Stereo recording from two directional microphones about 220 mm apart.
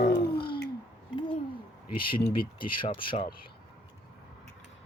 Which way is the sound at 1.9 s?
40° left (ahead or behind).